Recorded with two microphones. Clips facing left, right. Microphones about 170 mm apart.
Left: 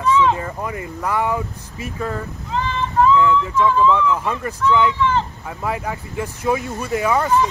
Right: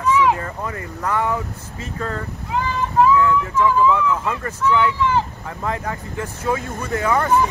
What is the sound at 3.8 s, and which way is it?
Speech, 10° right (ahead or behind).